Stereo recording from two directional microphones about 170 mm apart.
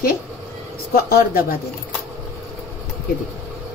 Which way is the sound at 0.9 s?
60° left (ahead or behind).